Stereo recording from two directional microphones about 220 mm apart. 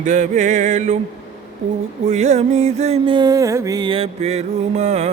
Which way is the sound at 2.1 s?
30° right (ahead or behind).